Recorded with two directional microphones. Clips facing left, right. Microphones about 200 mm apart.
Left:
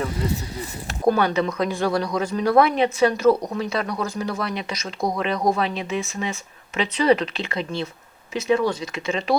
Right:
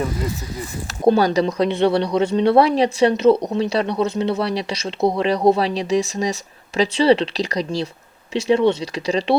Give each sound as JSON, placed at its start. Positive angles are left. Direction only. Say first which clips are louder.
{"t": 1.0, "sound": "speech", "louder": "right 4 dB", "side_deg": -30}